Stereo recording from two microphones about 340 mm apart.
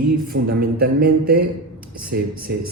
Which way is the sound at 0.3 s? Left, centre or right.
Right.